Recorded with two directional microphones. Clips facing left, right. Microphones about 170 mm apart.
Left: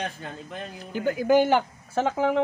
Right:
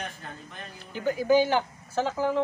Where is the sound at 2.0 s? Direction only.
70° left (ahead or behind).